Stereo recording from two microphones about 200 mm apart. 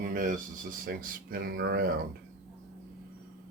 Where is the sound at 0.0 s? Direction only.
40° right (ahead or behind).